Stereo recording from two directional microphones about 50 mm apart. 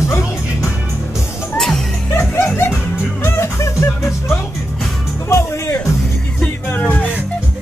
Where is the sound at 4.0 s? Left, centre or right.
Left.